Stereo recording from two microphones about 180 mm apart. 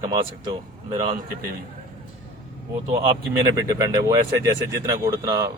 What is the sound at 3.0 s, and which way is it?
Speech, 25° right (ahead or behind).